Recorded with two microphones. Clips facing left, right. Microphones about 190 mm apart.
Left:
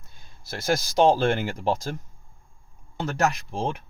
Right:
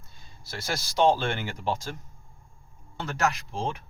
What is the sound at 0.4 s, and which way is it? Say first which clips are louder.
Speech: left 8 dB; 50° left (ahead or behind).